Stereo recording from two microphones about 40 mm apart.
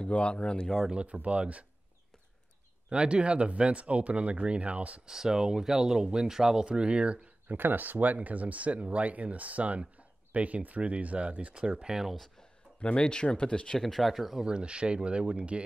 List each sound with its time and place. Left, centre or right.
0.0 s speech: left
1.0 s speech: right
2.9 s speech: right
5.0 s speech: centre
7.4 s speech: right
9.9 s a sound: right
10.8 s speech: right; by 12.1 s centre
12.8 s speech: left
13.7 s speech: centre
14.4 s speech: right